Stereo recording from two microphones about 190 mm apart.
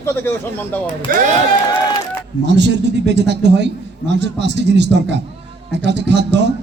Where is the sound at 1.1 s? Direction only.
50° right (ahead or behind).